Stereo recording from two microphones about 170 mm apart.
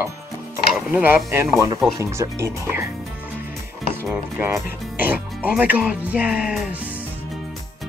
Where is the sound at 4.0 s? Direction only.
15° right (ahead or behind).